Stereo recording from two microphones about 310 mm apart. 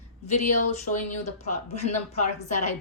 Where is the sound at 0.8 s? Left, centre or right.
Left.